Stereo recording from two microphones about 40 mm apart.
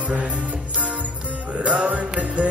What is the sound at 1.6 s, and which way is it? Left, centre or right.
Music, right.